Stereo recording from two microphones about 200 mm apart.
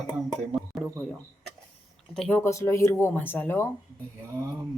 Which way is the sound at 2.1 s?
5° left (ahead or behind).